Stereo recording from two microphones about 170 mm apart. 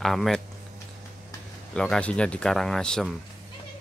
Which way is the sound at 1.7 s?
5° left (ahead or behind).